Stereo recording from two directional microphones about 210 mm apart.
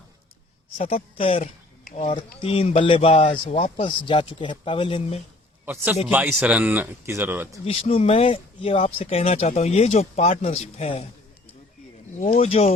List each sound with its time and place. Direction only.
0.8 s speech: 30° left (ahead or behind)
5.6 s speech: 10° right (ahead or behind)
7.6 s speech: 30° left (ahead or behind)
12.2 s speech: 35° left (ahead or behind)